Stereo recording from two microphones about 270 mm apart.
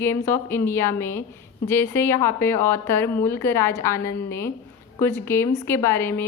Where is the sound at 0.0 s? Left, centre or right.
Centre.